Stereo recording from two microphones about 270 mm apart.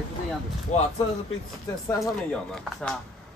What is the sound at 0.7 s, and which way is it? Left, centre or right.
Speech, left.